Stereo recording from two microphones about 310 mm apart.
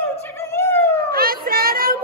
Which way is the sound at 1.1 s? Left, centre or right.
Right.